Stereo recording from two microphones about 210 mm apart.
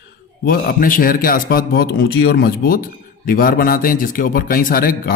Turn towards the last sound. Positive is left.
turn(degrees=45)  # may be behind; listen again after turning